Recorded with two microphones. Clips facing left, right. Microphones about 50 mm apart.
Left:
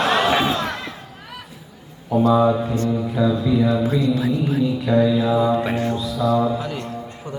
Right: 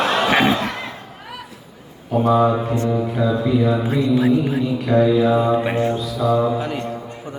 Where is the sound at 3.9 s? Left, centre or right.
Right.